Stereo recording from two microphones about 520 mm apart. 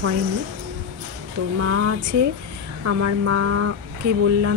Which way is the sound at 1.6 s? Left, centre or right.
Right.